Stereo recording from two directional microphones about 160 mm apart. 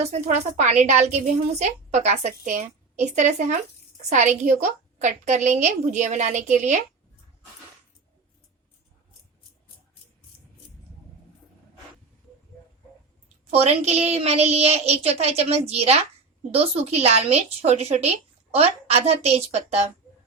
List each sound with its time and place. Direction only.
0.0 s a woman's voice: 45° right (ahead or behind)
13.5 s a woman's voice: 40° right (ahead or behind)